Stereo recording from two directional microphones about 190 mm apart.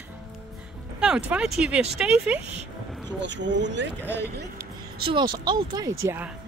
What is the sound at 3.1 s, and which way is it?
Speech, 70° right (ahead or behind).